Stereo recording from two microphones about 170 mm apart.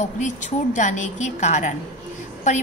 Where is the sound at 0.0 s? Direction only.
45° left (ahead or behind).